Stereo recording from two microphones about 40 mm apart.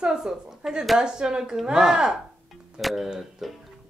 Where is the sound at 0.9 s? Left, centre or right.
Centre.